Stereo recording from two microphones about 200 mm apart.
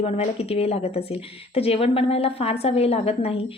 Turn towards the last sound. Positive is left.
turn(degrees=30)  # may be behind; listen again after turning